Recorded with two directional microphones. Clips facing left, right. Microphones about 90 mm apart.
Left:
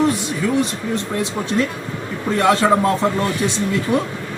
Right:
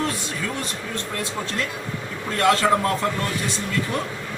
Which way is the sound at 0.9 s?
20° left (ahead or behind).